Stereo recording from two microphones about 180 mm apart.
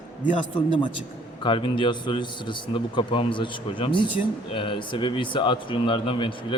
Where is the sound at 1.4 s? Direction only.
25° left (ahead or behind).